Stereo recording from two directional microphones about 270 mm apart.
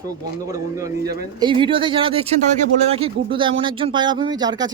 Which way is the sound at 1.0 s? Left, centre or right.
Centre.